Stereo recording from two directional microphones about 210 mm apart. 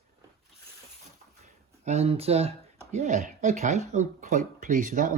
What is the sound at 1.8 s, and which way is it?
Speech, 30° right (ahead or behind).